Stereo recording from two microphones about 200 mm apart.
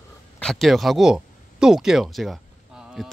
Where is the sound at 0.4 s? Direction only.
Centre (ahead or behind).